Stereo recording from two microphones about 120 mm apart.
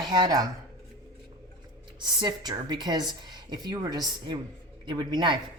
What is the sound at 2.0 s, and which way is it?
A woman's voice, 40° right (ahead or behind).